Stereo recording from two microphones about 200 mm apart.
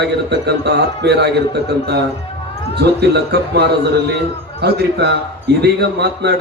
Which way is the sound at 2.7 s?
55° right (ahead or behind).